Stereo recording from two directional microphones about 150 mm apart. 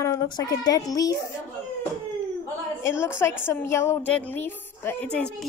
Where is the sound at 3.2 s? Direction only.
15° left (ahead or behind).